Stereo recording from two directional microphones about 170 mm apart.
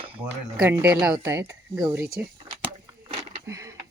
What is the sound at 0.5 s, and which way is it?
Speech, 5° right (ahead or behind).